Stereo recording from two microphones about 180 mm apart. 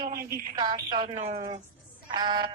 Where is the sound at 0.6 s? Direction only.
25° right (ahead or behind).